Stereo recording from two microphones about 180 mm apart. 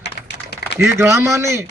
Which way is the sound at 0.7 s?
15° right (ahead or behind).